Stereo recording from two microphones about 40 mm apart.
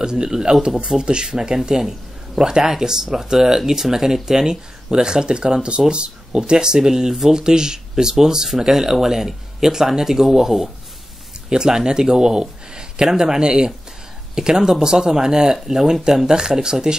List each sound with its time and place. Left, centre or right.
0.0 s speech: centre